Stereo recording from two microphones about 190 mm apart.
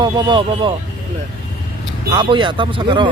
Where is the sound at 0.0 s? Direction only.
25° right (ahead or behind).